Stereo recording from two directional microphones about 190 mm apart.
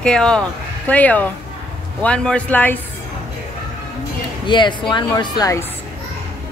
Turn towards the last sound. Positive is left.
turn(degrees=15)  # may be behind; listen again after turning